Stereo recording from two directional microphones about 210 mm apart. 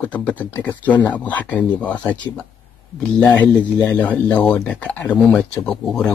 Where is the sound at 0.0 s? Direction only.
5° left (ahead or behind).